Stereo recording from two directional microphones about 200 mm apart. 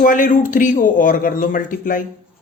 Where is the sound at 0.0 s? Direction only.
40° left (ahead or behind).